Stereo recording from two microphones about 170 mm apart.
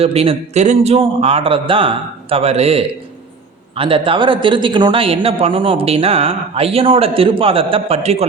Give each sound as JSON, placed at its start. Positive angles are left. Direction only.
{"t": 0.0, "sound": "speech", "side_deg": -35}